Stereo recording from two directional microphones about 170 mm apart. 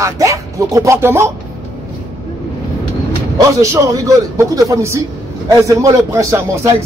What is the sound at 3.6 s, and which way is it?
A man's voice, 20° right (ahead or behind).